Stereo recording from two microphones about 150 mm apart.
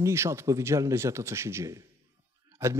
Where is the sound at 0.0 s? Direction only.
20° right (ahead or behind).